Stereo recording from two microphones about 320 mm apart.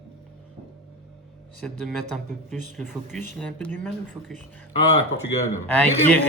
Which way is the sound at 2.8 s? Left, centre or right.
Centre.